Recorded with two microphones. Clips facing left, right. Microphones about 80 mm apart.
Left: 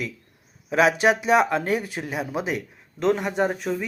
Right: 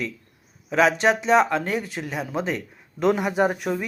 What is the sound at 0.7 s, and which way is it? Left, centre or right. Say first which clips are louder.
Speech: even; centre.